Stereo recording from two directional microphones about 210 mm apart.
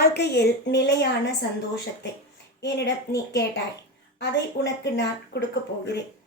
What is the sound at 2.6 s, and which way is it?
A woman's voice, 55° left (ahead or behind).